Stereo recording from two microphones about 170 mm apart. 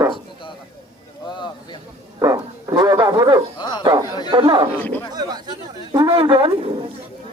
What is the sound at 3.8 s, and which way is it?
Speech, 20° right (ahead or behind).